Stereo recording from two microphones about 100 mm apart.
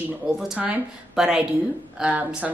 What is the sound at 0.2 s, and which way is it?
Speech, 5° right (ahead or behind).